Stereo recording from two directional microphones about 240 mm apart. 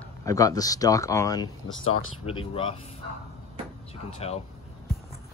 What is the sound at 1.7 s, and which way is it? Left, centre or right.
Speech, left.